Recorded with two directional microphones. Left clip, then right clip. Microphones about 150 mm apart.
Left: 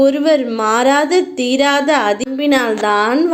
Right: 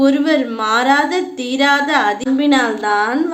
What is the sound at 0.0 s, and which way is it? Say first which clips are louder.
A woman's voice: left 2 dB; 30° left (ahead or behind).